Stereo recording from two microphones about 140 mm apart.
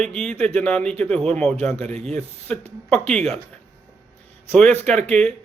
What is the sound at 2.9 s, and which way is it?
Speech, 5° left (ahead or behind).